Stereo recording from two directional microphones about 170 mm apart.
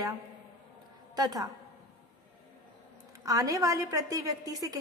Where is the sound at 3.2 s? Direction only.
20° right (ahead or behind).